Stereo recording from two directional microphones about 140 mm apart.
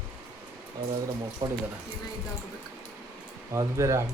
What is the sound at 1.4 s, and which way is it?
Speech, 30° right (ahead or behind).